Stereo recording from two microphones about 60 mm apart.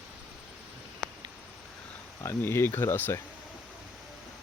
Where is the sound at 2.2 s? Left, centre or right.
Left.